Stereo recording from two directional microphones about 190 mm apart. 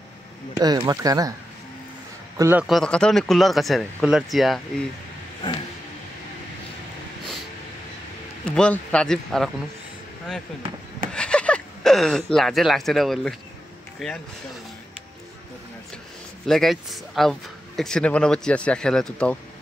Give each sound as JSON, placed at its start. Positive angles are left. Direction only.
{"t": 0.6, "sound": "speech", "side_deg": -20}
{"t": 2.3, "sound": "speech", "side_deg": -15}
{"t": 2.6, "sound": "speech", "side_deg": 0}
{"t": 8.5, "sound": "speech", "side_deg": 5}
{"t": 11.1, "sound": "speech", "side_deg": 5}
{"t": 16.4, "sound": "speech", "side_deg": 0}